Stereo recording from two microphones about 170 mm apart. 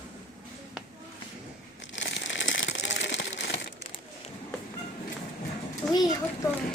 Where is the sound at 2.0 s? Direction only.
90° left.